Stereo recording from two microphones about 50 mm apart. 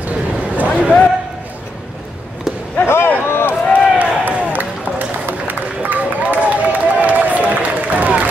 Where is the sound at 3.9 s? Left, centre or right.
Right.